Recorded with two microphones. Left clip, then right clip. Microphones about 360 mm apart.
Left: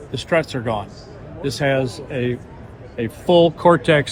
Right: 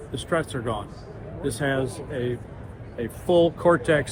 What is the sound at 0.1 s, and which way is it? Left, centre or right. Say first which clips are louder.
Speech: left 7 dB; left.